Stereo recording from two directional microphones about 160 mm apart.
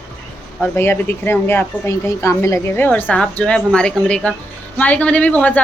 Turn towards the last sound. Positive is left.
turn(degrees=10)  # may be behind; listen again after turning